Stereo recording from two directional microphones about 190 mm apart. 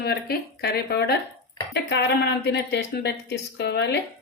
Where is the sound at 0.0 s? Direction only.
55° left (ahead or behind).